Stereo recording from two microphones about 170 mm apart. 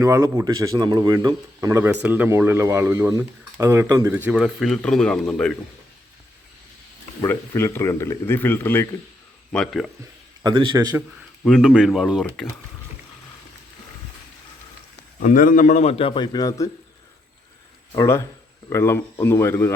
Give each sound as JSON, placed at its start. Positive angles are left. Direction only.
{"t": 0.0, "sound": "speech", "side_deg": -20}
{"t": 7.2, "sound": "speech", "side_deg": 15}
{"t": 10.4, "sound": "a man's voice", "side_deg": -25}
{"t": 11.4, "sound": "speech", "side_deg": 0}
{"t": 15.2, "sound": "a man's voice", "side_deg": 50}
{"t": 17.9, "sound": "speech", "side_deg": 15}